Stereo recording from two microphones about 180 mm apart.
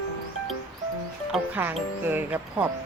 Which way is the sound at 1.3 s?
10° right (ahead or behind).